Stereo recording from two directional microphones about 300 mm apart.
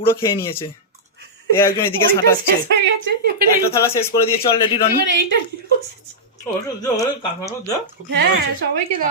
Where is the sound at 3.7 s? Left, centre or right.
Centre.